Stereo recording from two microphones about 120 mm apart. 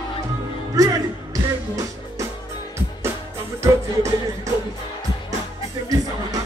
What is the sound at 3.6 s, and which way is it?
Music, 25° right (ahead or behind).